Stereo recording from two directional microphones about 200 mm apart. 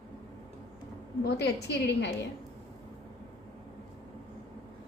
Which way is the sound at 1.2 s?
55° left (ahead or behind).